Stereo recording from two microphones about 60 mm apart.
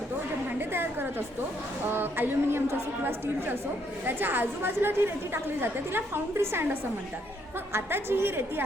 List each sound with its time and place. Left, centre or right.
0.7 s a woman's voice: right
7.7 s a woman's voice: right